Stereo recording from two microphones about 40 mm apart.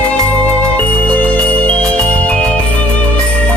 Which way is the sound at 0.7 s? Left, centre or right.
Left.